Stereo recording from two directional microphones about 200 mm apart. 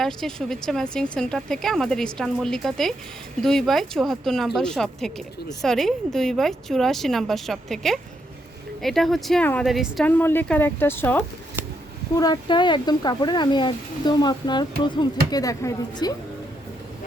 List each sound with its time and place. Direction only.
0.0 s a woman's voice: centre (ahead or behind); by 16.1 s 20° left (ahead or behind)